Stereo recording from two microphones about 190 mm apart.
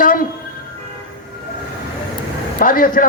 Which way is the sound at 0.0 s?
45° left (ahead or behind).